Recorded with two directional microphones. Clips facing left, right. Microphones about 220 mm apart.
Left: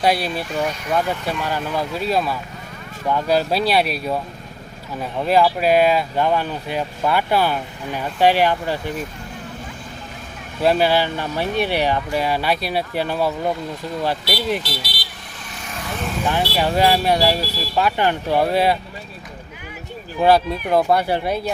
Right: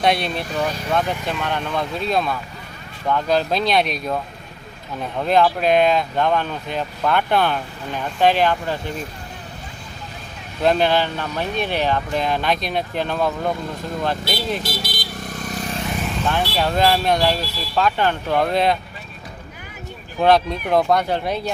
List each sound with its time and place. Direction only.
0.0 s speech: 5° left (ahead or behind)
10.6 s speech: 5° left (ahead or behind)
14.6 s vehicle: 45° right (ahead or behind)
16.2 s speech: 10° left (ahead or behind)
20.2 s speech: 5° left (ahead or behind)